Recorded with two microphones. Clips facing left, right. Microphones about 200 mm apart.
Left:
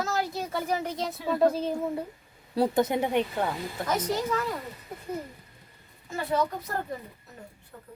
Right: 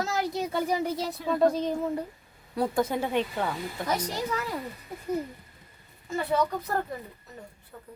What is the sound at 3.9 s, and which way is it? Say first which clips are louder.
Speech: left 3 dB; 10° right (ahead or behind).